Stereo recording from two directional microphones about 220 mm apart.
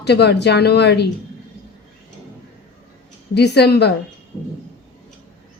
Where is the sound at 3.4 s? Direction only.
50° left (ahead or behind).